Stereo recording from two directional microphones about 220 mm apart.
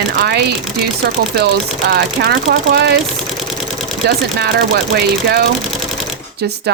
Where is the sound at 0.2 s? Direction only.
50° right (ahead or behind).